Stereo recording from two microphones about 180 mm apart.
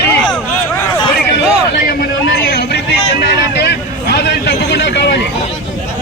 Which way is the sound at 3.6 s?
70° left (ahead or behind).